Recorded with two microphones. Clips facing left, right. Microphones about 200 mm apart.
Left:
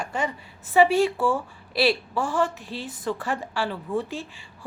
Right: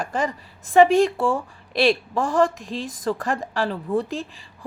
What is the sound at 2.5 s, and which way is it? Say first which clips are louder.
Speech: right 4 dB; 90° right.